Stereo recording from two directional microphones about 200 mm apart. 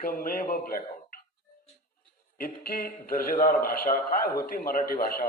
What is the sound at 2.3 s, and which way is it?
A man's voice, 45° left (ahead or behind).